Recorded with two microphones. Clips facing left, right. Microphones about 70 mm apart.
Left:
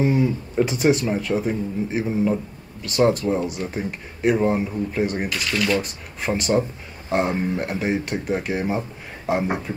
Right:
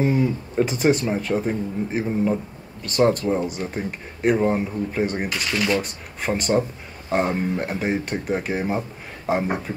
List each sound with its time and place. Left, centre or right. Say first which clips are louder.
0.0 s speech: left 1 dB; centre
5.5 s speech: even; centre
5.8 s speech: even; centre